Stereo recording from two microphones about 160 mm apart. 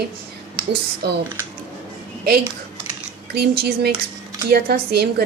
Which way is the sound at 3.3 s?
85° right.